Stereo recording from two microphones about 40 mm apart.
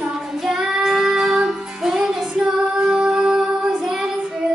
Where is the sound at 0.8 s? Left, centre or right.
Centre.